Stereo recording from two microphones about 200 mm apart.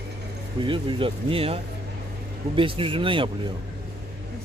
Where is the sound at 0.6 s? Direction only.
25° right (ahead or behind).